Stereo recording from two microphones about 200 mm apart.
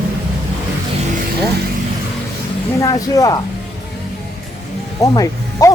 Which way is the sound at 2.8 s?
15° left (ahead or behind).